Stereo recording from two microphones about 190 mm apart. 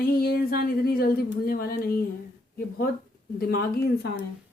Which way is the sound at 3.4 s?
55° left (ahead or behind).